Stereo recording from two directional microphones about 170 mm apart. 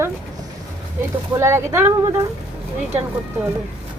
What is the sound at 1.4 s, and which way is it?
Speech, 15° right (ahead or behind).